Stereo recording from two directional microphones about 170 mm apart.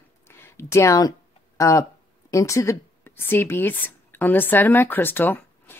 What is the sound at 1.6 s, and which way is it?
Speech, 20° left (ahead or behind).